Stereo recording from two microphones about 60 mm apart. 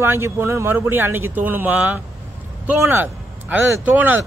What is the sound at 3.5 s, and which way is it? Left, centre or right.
Speech, right.